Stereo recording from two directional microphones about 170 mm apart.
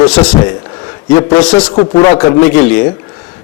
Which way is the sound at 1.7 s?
25° left (ahead or behind).